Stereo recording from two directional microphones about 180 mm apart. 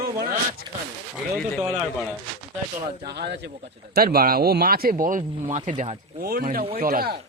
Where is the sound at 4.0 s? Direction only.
55° right (ahead or behind).